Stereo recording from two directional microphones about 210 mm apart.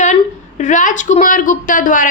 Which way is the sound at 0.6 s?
35° left (ahead or behind).